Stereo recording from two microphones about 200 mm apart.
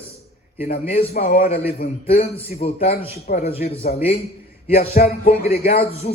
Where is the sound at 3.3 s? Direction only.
45° left (ahead or behind).